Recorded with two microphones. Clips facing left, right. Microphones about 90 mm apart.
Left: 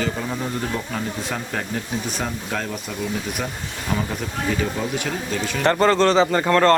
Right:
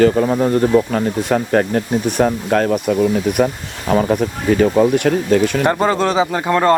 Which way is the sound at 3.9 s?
70° right (ahead or behind).